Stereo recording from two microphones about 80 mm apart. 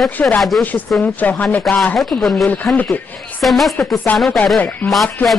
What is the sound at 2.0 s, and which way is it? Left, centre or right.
Speech, centre.